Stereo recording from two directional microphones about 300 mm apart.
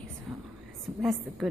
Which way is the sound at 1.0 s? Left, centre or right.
Centre.